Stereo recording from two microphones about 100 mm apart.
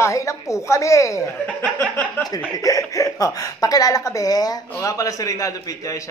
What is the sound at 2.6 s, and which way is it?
A woman's voice, 35° left (ahead or behind).